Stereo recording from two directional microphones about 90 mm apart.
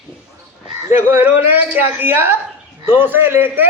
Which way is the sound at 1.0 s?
25° right (ahead or behind).